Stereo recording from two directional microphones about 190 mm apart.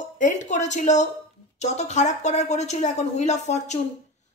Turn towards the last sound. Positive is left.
turn(degrees=35)  # may be behind; listen again after turning